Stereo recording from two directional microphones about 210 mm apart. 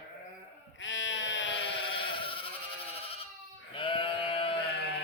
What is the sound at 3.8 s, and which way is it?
Sheep, 25° left (ahead or behind).